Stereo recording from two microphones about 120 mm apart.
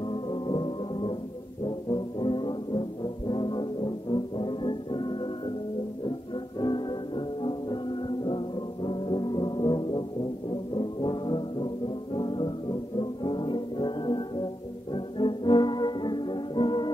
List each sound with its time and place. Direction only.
0.1 s music: 40° left (ahead or behind)
1.9 s brass instrument: 40° left (ahead or behind)
6.6 s music: 40° left (ahead or behind)